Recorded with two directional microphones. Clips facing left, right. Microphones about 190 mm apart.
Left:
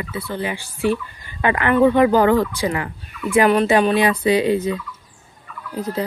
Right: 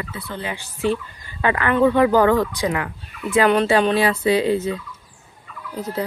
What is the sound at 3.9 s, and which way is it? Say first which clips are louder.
Speech: left 1 dB; 15° left (ahead or behind).